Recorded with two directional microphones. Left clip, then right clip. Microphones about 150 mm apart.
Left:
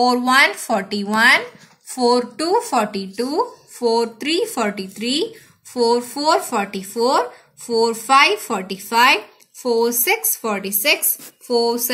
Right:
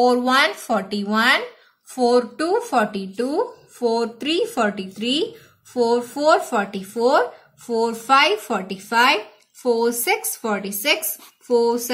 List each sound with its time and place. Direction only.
0.0 s speech: 25° left (ahead or behind)